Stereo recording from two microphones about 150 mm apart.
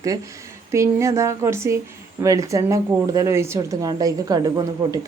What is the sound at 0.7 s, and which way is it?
A woman's voice, 20° right (ahead or behind).